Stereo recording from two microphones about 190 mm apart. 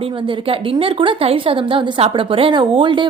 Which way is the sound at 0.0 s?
30° right (ahead or behind).